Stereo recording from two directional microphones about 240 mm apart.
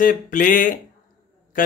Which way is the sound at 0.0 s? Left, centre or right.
Left.